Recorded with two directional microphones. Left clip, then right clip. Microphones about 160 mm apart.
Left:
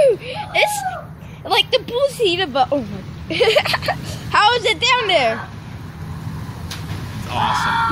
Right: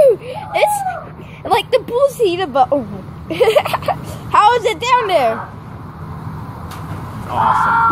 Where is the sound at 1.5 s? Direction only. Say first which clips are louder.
Right 2 dB; 30° right (ahead or behind).